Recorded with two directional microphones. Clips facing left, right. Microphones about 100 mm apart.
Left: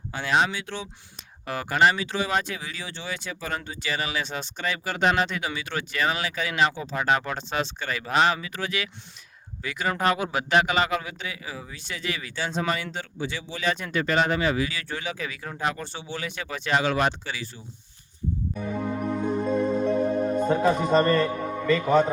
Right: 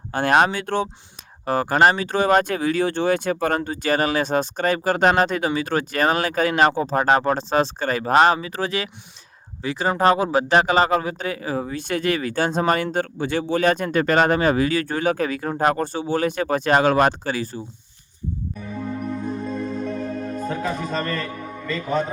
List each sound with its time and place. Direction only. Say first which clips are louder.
0.1 s a man's voice: right 6 dB; 50° right (ahead or behind)
1.5 s a man's voice: right 5 dB; 40° right (ahead or behind)
18.6 s music: left 1 dB; 15° left (ahead or behind)